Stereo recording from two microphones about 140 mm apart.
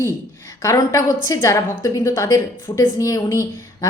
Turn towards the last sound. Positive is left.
turn(degrees=25)  # may be behind; listen again after turning